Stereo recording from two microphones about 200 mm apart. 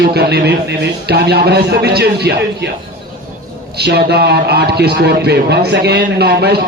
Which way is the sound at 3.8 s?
55° right (ahead or behind).